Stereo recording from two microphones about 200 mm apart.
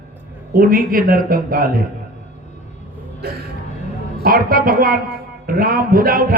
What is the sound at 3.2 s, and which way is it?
A man's voice, 50° right (ahead or behind).